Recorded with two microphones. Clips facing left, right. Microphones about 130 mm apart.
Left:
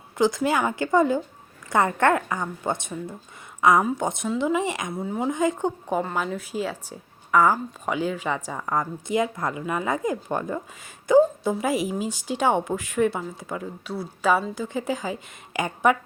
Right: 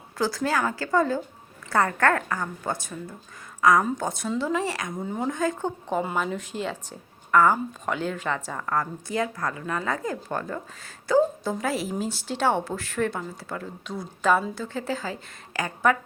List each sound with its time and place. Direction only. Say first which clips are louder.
0.2 s a woman's voice: left 3 dB; 20° left (ahead or behind)
3.8 s a woman's voice: left 2 dB; 10° left (ahead or behind)
4.9 s speech: left 2 dB; 5° left (ahead or behind)
5.3 s a woman's voice: left 5 dB; 15° left (ahead or behind)
6.0 s a woman's voice: right 2 dB; centre (ahead or behind); by 16.0 s 20° left (ahead or behind)